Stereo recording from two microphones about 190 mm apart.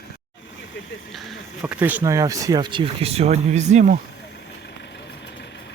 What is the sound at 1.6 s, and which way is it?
Speech, 10° right (ahead or behind).